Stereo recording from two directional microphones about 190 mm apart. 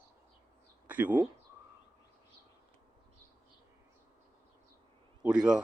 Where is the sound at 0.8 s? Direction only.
10° right (ahead or behind).